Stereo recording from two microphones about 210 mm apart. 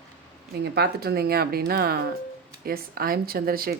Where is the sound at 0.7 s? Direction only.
50° right (ahead or behind).